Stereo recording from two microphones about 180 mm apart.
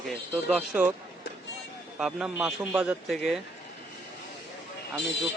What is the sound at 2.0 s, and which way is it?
A man's voice, 5° right (ahead or behind).